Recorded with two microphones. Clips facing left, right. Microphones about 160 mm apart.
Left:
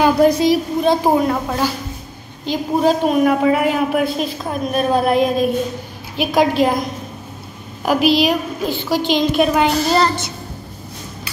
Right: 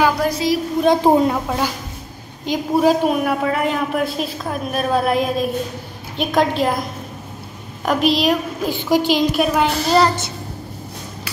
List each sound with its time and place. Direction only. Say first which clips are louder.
0.0 s a woman's voice: left 5 dB; 20° left (ahead or behind)
0.8 s speech: right 2 dB; 20° right (ahead or behind)
2.4 s a woman's voice: even; 10° right (ahead or behind)
3.4 s a child's voice: left 4 dB; 5° left (ahead or behind)
7.8 s a child's voice: left 2 dB; 5° left (ahead or behind)
8.6 s a child's voice: right 2 dB; 10° right (ahead or behind)